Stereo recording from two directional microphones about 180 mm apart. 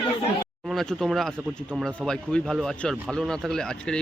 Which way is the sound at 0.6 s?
Centre (ahead or behind).